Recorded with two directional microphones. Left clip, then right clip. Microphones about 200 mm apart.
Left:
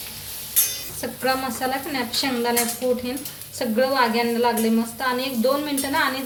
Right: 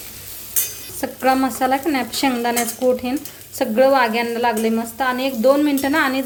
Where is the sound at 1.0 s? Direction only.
50° right (ahead or behind).